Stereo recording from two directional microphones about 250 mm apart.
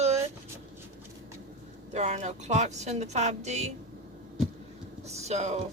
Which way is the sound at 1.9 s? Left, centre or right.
Right.